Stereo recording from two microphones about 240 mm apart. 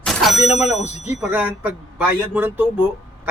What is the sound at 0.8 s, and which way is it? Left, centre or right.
Speech, left.